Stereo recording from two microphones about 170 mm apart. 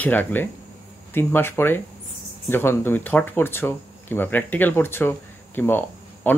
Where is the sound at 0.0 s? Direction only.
10° left (ahead or behind).